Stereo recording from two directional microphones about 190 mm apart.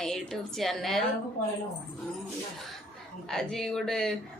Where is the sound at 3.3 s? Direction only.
5° left (ahead or behind).